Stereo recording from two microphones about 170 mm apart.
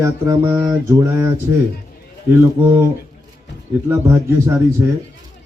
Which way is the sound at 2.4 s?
15° right (ahead or behind).